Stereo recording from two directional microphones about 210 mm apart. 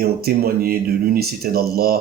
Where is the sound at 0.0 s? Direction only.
45° right (ahead or behind).